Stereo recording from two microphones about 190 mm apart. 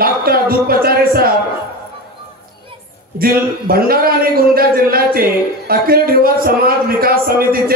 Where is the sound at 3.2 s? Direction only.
50° right (ahead or behind).